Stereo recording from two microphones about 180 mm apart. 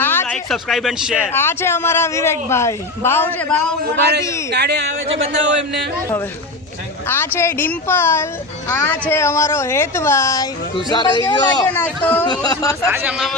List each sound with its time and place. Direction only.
0.0 s a sound: 10° left (ahead or behind)
0.4 s speech: centre (ahead or behind)
1.3 s speech: 15° left (ahead or behind)
3.9 s speech: 70° right (ahead or behind)
4.2 s speech: 15° left (ahead or behind)
4.5 s speech: 65° right (ahead or behind)
5.0 s speech: 35° right (ahead or behind)
5.3 s speech: 90° right
7.3 s speech: 10° left (ahead or behind)
11.7 s speech: 10° left (ahead or behind)
12.3 s speech: 20° left (ahead or behind)
12.9 s a man's voice: 10° right (ahead or behind)